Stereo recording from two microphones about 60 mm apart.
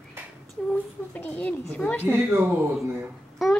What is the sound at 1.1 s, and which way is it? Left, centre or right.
Speech, left.